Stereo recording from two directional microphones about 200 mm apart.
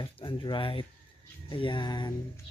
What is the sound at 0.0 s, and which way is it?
Speech, 25° left (ahead or behind).